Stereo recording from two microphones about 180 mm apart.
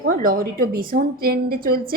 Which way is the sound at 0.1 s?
50° right (ahead or behind).